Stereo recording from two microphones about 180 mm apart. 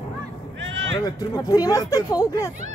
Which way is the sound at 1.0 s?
20° left (ahead or behind).